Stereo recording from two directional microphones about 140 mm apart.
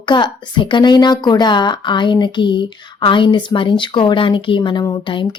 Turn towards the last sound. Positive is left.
turn(degrees=35)  # may be behind; listen again after turning